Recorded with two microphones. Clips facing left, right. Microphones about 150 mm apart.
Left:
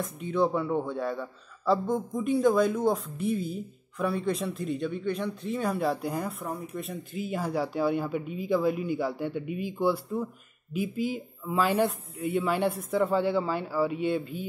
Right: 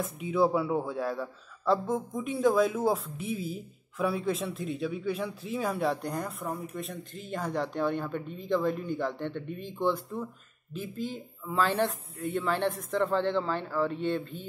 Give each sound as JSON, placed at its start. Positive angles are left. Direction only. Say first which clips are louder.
{"t": 0.0, "sound": "speech", "louder": "even", "side_deg": -5}